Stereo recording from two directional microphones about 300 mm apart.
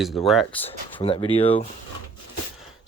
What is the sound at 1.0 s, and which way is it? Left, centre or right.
Speech, centre.